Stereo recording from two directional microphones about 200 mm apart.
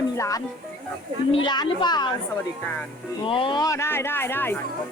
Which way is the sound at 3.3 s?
25° left (ahead or behind).